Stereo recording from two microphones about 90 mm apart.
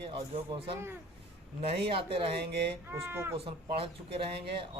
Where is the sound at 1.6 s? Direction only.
85° right.